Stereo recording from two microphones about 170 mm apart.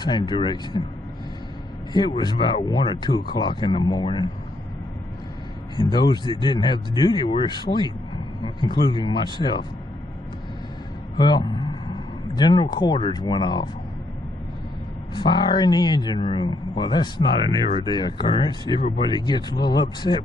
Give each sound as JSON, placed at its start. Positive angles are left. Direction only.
{"t": 0.0, "sound": "speech", "side_deg": 25}
{"t": 2.0, "sound": "speech", "side_deg": 25}
{"t": 5.8, "sound": "speech", "side_deg": 25}
{"t": 11.1, "sound": "speech", "side_deg": 25}
{"t": 15.1, "sound": "speech", "side_deg": 25}